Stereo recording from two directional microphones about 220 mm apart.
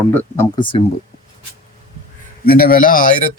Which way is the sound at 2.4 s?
40° left (ahead or behind).